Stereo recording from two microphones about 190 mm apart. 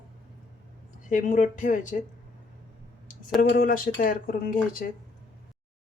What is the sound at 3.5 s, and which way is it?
Speech, 50° left (ahead or behind).